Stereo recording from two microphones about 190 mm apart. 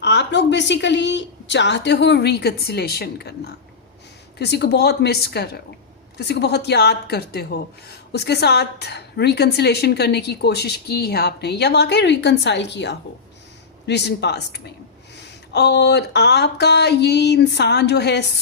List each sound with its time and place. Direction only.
0.0 s a woman's voice: 65° left (ahead or behind)